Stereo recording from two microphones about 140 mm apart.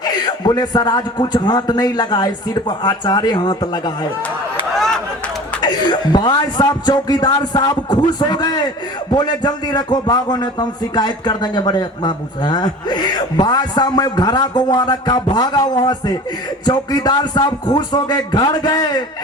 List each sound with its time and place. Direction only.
0.0 s a man's voice: 30° left (ahead or behind)
4.7 s a sound: centre (ahead or behind)
5.5 s a man's voice: 30° left (ahead or behind)